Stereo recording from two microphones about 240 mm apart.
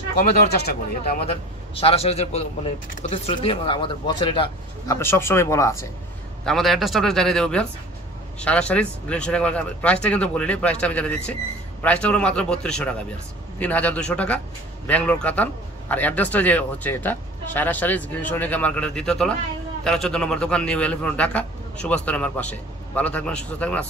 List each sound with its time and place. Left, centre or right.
0.2 s speech: left
1.2 s speech: left
6.4 s a man's voice: centre